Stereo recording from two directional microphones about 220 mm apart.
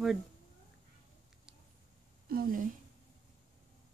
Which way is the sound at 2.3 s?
40° right (ahead or behind).